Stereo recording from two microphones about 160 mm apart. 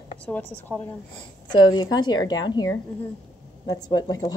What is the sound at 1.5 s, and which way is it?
Speech, 25° left (ahead or behind).